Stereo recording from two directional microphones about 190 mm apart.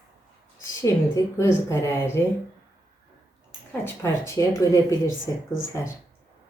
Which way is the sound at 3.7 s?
15° left (ahead or behind).